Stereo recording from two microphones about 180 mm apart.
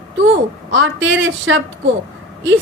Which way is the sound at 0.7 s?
90° right.